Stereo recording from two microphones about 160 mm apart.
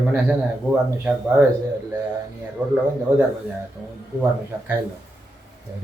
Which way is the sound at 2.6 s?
10° right (ahead or behind).